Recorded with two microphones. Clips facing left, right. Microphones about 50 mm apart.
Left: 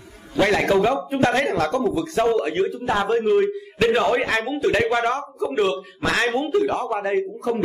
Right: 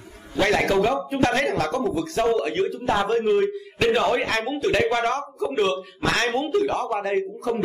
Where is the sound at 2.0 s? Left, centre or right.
Left.